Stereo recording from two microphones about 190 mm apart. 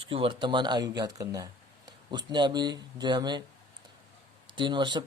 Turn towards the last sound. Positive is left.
turn(degrees=-25)  # may be behind; listen again after turning